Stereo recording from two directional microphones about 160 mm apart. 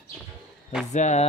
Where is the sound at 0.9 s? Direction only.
45° left (ahead or behind).